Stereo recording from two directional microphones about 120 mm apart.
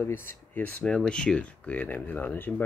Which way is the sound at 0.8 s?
10° left (ahead or behind).